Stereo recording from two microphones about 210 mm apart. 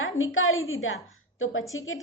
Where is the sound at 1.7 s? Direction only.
70° left (ahead or behind).